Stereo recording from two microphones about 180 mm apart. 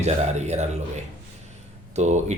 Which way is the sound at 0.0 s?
40° right (ahead or behind).